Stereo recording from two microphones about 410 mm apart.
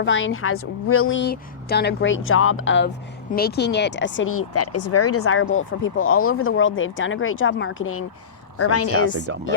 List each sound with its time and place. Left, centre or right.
0.0 s a woman's voice: left